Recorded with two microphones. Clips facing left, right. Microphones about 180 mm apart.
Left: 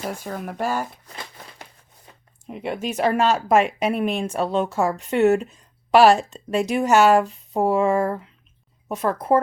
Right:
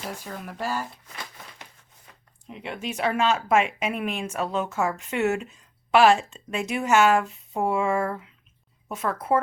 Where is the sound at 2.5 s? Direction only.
45° left (ahead or behind).